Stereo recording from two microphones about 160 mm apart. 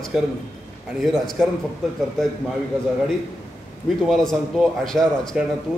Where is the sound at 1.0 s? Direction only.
Centre (ahead or behind).